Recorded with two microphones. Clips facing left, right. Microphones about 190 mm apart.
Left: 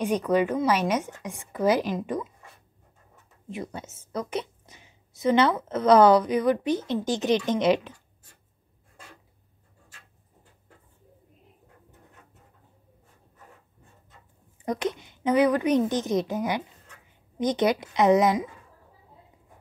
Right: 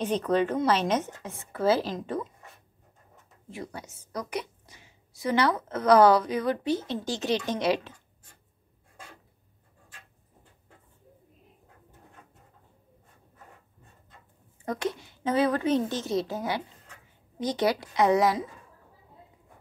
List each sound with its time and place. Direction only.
0.0 s a woman's voice: 10° left (ahead or behind)
3.4 s a woman's voice: 20° left (ahead or behind)
14.6 s a woman's voice: 20° left (ahead or behind)